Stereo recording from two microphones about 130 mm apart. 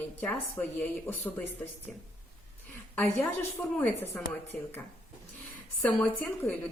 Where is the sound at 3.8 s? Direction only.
15° left (ahead or behind).